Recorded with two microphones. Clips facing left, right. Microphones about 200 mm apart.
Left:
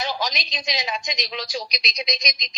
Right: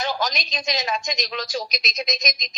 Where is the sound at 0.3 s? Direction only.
45° right (ahead or behind).